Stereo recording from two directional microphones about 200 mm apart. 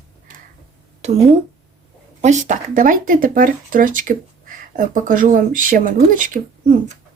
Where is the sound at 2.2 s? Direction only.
35° right (ahead or behind).